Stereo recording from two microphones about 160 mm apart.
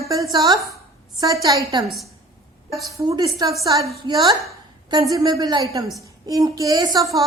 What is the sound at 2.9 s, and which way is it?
A woman's voice, 20° right (ahead or behind).